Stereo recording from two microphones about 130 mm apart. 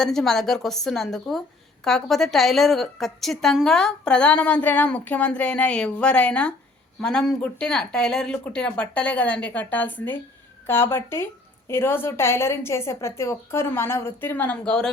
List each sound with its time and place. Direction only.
0.0 s a woman's voice: 5° left (ahead or behind)